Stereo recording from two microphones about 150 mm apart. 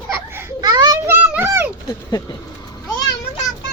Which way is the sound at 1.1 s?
10° right (ahead or behind).